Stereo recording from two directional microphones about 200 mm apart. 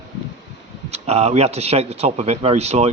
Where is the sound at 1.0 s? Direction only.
30° right (ahead or behind).